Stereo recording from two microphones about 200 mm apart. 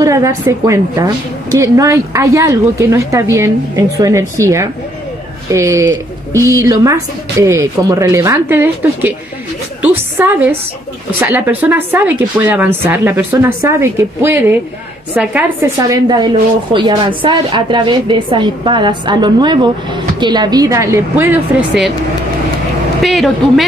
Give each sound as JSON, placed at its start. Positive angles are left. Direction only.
{"t": 0.0, "sound": "a woman's voice", "side_deg": -15}
{"t": 10.1, "sound": "a woman's voice", "side_deg": -10}
{"t": 23.0, "sound": "a woman's voice", "side_deg": 0}